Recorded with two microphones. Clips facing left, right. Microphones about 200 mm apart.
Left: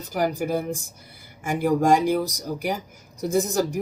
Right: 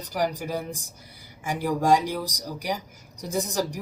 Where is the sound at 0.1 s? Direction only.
50° left (ahead or behind).